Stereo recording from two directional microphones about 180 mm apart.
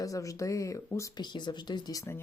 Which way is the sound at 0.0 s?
20° left (ahead or behind).